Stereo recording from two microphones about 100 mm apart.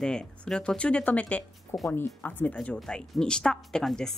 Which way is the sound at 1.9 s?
30° left (ahead or behind).